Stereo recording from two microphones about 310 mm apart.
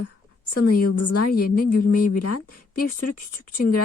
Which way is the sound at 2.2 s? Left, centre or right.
Left.